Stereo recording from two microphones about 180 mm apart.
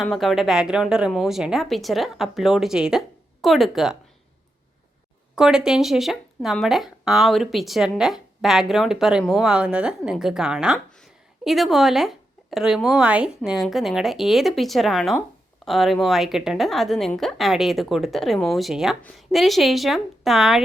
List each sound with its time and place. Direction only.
0.0 s speech: centre (ahead or behind)
5.3 s speech: 5° right (ahead or behind)